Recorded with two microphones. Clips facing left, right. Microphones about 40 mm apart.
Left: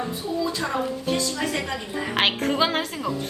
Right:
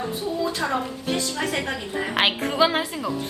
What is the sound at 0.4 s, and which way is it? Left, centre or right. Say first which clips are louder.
A woman's voice: right 1 dB; right.